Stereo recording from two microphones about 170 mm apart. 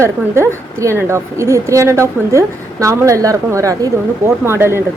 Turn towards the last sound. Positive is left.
turn(degrees=-15)  # may be behind; listen again after turning